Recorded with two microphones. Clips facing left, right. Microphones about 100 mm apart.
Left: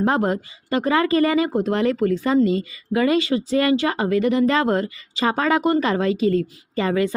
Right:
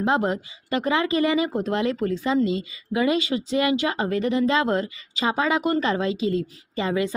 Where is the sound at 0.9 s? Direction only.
20° right (ahead or behind).